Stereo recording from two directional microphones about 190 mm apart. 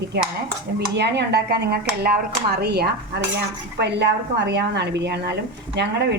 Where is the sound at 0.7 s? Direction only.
60° right (ahead or behind).